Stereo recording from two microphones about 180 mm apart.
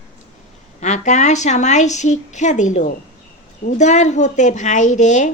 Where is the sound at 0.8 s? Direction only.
40° left (ahead or behind).